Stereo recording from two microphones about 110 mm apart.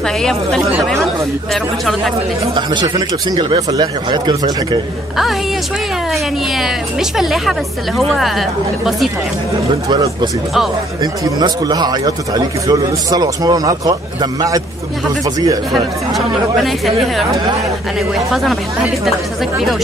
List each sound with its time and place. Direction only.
0.2 s speech: 5° left (ahead or behind)
2.5 s a man's voice: 45° right (ahead or behind)
6.6 s speech: 5° right (ahead or behind)
9.8 s a man's voice: 40° right (ahead or behind)
16.6 s speech: centre (ahead or behind)